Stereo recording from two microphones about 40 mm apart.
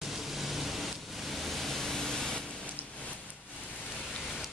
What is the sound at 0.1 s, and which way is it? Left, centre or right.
Pink noise, centre.